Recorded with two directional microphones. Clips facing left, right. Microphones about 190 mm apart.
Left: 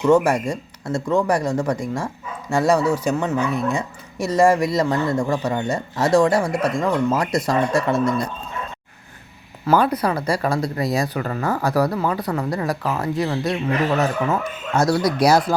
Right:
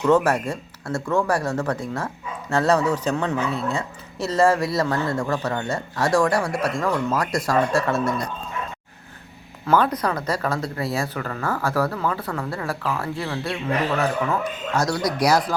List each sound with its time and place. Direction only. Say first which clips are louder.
0.0 s speech: left 2 dB; 10° left (ahead or behind)
9.6 s speech: left 2 dB; 10° left (ahead or behind); by 15.5 s 25° left (ahead or behind)